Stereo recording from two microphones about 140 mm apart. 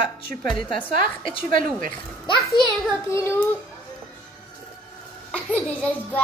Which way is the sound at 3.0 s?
20° left (ahead or behind).